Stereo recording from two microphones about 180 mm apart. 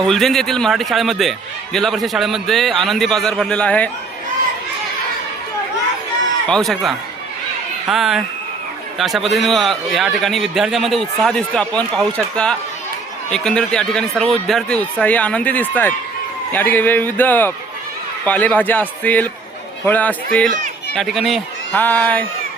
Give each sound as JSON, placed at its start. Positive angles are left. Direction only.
{"t": 0.0, "sound": "a man's voice", "side_deg": 0}
{"t": 6.5, "sound": "a man's voice", "side_deg": 0}